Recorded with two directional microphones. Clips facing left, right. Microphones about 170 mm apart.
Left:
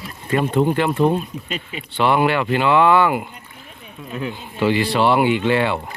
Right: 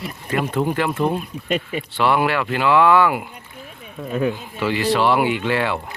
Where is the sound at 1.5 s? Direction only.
50° right (ahead or behind).